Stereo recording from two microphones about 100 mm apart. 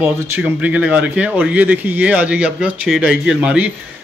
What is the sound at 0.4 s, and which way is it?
Speech, 15° right (ahead or behind).